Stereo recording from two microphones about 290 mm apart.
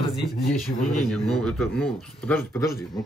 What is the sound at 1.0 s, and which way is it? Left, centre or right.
Speech, centre.